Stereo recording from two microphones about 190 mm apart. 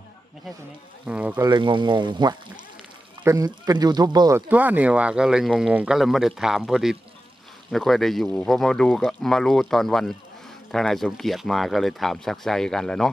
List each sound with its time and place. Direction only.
1.0 s speech: 10° right (ahead or behind)
1.4 s speech: 25° right (ahead or behind)
4.5 s speech: 10° right (ahead or behind)